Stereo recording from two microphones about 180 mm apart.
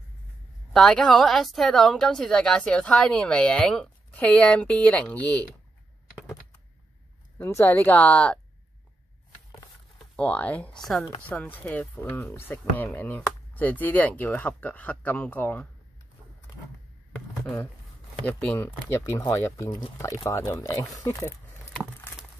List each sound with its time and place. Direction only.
0.7 s a woman's voice: 5° left (ahead or behind)
7.3 s speech: 10° left (ahead or behind)
10.1 s speech: 10° left (ahead or behind)
18.2 s speech: 10° left (ahead or behind)